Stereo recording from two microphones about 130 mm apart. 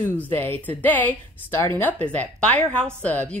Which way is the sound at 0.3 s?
15° left (ahead or behind).